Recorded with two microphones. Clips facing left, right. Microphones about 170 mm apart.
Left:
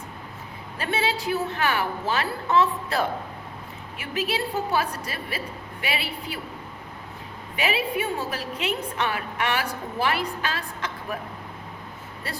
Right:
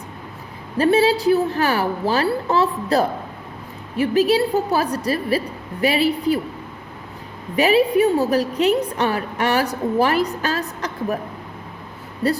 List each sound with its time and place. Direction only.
0.8 s a woman's voice: 35° right (ahead or behind)
7.5 s a woman's voice: 40° right (ahead or behind)
12.2 s a woman's voice: 35° right (ahead or behind)